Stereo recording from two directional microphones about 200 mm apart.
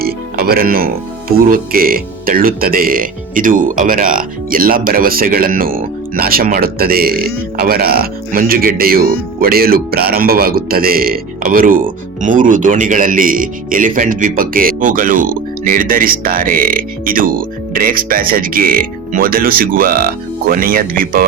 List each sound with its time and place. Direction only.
0.0 s music: 50° right (ahead or behind)
1.4 s speech: 45° right (ahead or behind)